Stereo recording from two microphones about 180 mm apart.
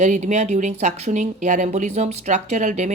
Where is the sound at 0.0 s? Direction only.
40° right (ahead or behind).